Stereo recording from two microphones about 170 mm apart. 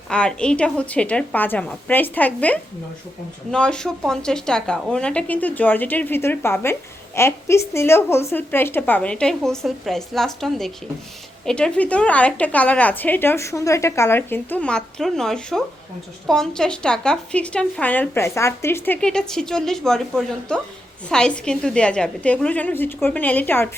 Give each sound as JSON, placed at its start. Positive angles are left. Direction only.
{"t": 0.1, "sound": "a woman's voice", "side_deg": 5}